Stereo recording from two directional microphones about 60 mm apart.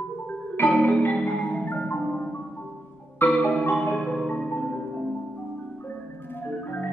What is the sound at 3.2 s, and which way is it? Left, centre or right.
Marimba, left.